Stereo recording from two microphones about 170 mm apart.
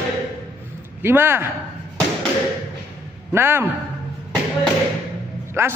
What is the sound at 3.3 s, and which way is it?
Speech, 15° right (ahead or behind).